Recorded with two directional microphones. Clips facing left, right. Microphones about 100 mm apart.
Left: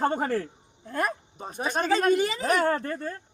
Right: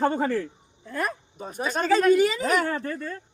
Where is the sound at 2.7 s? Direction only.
40° left (ahead or behind).